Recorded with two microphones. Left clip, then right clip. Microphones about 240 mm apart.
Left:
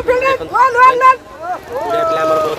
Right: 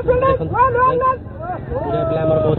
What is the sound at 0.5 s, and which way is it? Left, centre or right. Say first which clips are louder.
Speech: left 8 dB; left.